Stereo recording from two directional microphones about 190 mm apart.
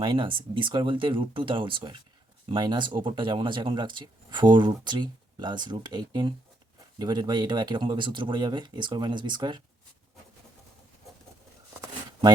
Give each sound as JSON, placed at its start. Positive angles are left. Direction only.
{"t": 0.0, "sound": "speech", "side_deg": -25}